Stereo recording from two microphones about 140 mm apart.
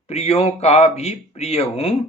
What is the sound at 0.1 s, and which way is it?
A man's voice, 50° left (ahead or behind).